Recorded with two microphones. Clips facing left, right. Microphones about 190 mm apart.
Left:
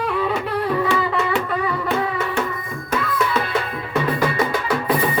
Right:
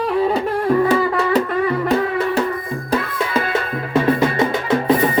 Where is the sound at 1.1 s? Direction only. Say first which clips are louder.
Right 4 dB; 40° right (ahead or behind).